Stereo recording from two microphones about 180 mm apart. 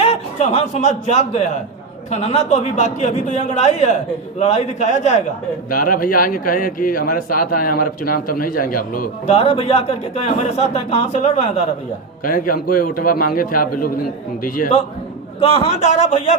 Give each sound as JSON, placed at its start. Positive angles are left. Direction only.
{"t": 0.0, "sound": "a man's voice", "side_deg": 35}
{"t": 5.7, "sound": "a man's voice", "side_deg": 50}
{"t": 9.3, "sound": "speech", "side_deg": 35}
{"t": 12.2, "sound": "a man's voice", "side_deg": 50}
{"t": 15.4, "sound": "speech", "side_deg": 30}